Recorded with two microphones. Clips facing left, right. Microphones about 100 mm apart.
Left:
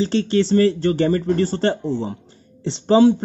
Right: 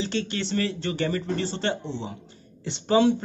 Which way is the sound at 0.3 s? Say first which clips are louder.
Left 12 dB; 35° left (ahead or behind).